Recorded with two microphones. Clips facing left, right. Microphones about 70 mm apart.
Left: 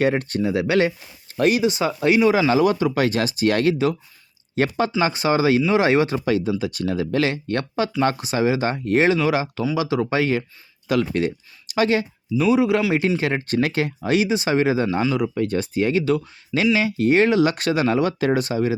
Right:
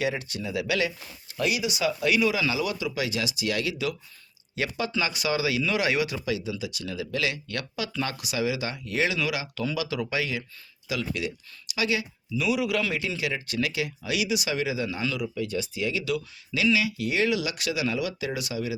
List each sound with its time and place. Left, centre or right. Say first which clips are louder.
0.0 s speech: left 9 dB; left